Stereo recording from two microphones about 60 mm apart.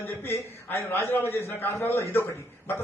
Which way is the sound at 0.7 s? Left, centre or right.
Left.